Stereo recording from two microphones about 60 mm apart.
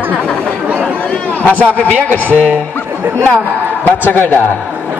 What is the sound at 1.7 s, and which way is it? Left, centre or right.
Speech, left.